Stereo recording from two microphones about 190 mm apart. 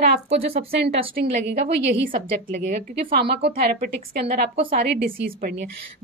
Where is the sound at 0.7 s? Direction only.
60° right (ahead or behind).